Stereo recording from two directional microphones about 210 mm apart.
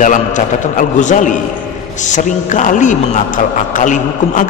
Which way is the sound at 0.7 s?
35° left (ahead or behind).